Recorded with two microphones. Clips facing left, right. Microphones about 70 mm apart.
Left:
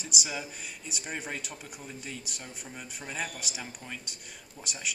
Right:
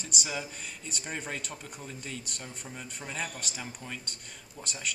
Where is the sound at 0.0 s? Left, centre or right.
Centre.